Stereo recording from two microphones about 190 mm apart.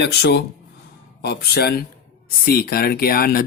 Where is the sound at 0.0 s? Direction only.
60° left (ahead or behind).